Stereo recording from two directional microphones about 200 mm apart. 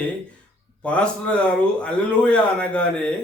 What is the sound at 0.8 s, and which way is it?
Speech, 5° left (ahead or behind).